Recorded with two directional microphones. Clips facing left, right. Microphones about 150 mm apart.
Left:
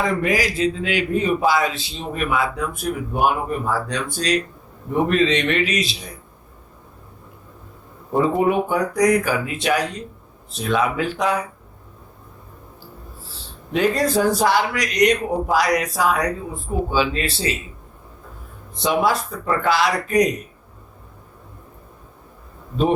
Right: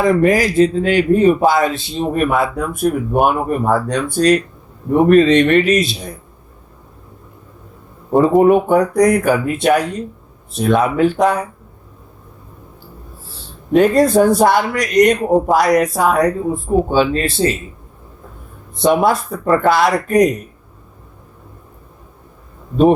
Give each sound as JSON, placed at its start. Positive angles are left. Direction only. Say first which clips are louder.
{"t": 0.2, "sound": "speech", "louder": "right 8 dB", "side_deg": -50}
{"t": 8.1, "sound": "speech", "louder": "right 7 dB", "side_deg": -45}
{"t": 13.7, "sound": "speech", "louder": "right 8 dB", "side_deg": -50}
{"t": 18.8, "sound": "speech", "louder": "right 6 dB", "side_deg": -50}